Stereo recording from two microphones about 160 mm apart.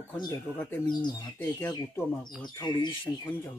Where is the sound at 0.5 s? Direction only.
10° left (ahead or behind).